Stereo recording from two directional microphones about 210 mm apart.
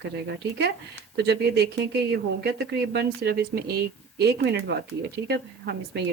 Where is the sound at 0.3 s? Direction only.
50° right (ahead or behind).